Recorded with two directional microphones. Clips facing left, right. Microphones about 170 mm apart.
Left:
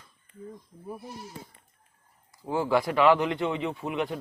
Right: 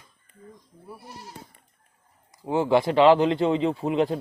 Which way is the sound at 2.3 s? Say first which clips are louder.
Right 4 dB; 20° right (ahead or behind).